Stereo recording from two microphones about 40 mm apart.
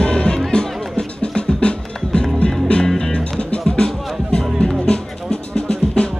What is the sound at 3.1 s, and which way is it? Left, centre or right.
Music, left.